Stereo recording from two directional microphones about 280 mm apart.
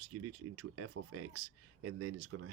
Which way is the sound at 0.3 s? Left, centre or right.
Right.